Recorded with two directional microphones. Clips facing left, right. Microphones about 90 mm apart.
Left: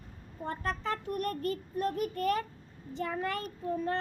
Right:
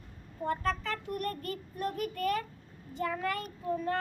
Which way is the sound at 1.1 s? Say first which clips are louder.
Left 3 dB; 30° left (ahead or behind).